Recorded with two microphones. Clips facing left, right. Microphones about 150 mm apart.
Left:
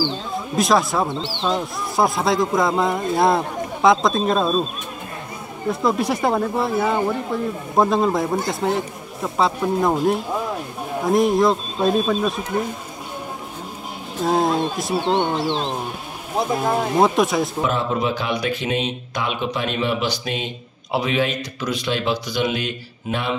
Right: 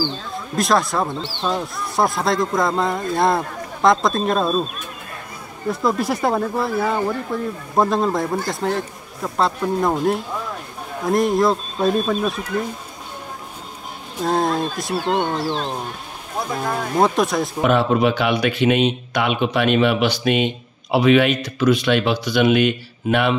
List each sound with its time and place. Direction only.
0.6 s speech: centre (ahead or behind)
5.7 s speech: centre (ahead or behind)
14.2 s speech: centre (ahead or behind)
16.6 s speech: 20° left (ahead or behind)
16.9 s speech: centre (ahead or behind)
17.6 s speech: 70° right (ahead or behind)